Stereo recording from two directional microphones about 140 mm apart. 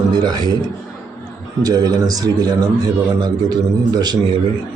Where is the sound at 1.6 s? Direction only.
25° right (ahead or behind).